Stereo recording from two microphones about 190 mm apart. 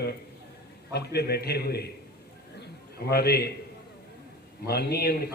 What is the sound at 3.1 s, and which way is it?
Speech, 55° left (ahead or behind).